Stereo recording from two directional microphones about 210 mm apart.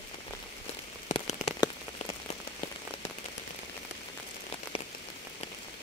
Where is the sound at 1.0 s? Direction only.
30° left (ahead or behind).